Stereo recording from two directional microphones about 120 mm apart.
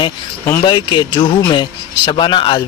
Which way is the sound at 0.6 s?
40° left (ahead or behind).